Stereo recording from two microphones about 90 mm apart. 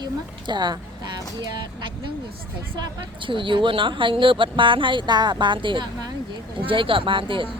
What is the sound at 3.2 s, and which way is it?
Speech, 70° right (ahead or behind).